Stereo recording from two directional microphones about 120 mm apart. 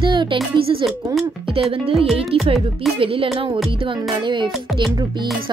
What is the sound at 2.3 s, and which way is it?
Music, 50° right (ahead or behind).